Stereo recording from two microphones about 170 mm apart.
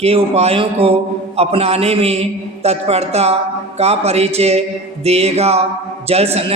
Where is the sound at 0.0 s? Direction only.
35° right (ahead or behind).